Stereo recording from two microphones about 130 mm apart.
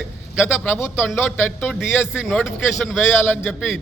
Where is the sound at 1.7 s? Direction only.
5° left (ahead or behind).